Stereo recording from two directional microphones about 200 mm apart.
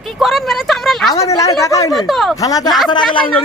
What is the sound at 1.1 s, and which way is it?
Speech, 15° left (ahead or behind).